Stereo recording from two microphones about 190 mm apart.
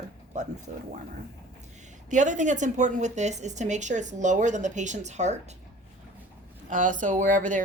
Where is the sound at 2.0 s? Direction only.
40° right (ahead or behind).